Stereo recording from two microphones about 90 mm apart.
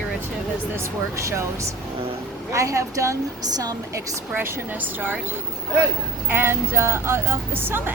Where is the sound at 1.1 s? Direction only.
35° right (ahead or behind).